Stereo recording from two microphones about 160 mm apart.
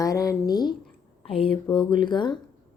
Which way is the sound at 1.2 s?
35° left (ahead or behind).